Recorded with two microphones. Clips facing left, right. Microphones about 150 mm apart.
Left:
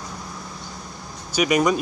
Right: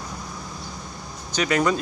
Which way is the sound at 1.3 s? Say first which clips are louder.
Left 2 dB; 10° left (ahead or behind).